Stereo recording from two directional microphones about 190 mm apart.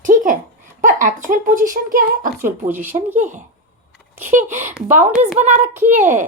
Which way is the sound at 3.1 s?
40° right (ahead or behind).